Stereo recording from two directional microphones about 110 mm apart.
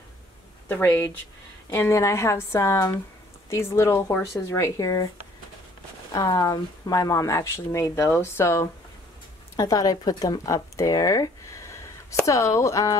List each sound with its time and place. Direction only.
0.7 s speech: 15° left (ahead or behind)
6.1 s speech: 35° left (ahead or behind)